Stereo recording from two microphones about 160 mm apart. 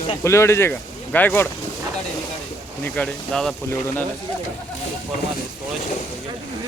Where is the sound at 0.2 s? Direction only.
15° left (ahead or behind).